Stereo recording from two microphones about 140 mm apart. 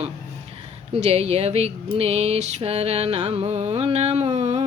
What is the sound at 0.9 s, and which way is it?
Music, 50° right (ahead or behind).